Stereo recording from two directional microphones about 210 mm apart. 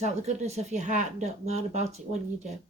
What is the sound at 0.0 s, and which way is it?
Speech, 35° right (ahead or behind).